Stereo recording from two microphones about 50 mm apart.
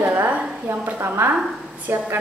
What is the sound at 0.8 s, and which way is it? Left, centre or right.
Speech, right.